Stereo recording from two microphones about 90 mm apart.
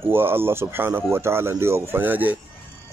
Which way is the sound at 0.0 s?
25° right (ahead or behind).